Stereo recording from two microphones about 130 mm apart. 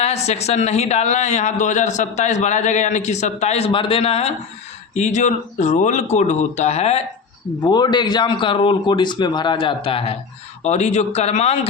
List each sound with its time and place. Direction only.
0.0 s a man's voice: 55° left (ahead or behind)
4.9 s a man's voice: 65° left (ahead or behind)
7.6 s speech: 35° left (ahead or behind)
10.6 s a man's voice: 60° left (ahead or behind)